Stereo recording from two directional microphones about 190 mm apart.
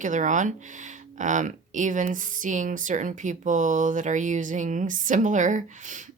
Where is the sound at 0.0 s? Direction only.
40° right (ahead or behind).